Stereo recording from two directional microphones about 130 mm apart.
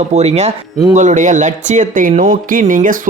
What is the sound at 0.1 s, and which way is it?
Speech, 55° right (ahead or behind).